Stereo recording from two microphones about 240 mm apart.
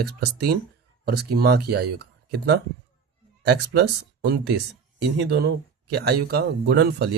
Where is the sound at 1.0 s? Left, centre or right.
Right.